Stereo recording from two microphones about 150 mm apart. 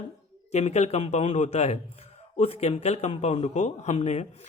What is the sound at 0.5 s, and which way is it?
A man's voice, 45° left (ahead or behind).